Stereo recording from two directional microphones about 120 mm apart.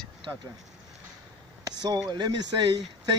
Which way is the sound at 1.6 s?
35° right (ahead or behind).